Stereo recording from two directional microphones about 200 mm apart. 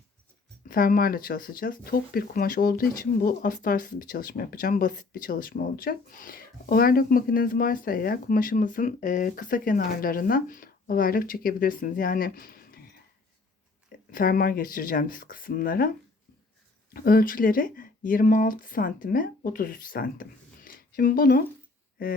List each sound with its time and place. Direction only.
0.7 s speech: 45° left (ahead or behind)
14.1 s speech: 45° left (ahead or behind)
16.9 s speech: 45° left (ahead or behind)